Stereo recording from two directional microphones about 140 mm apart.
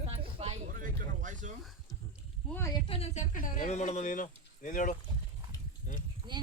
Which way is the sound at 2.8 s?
45° left (ahead or behind).